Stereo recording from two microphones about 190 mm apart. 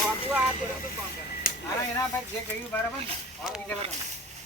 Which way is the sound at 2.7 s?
10° left (ahead or behind).